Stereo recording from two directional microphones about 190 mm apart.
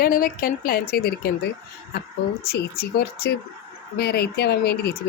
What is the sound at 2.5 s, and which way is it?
Speech, 55° left (ahead or behind).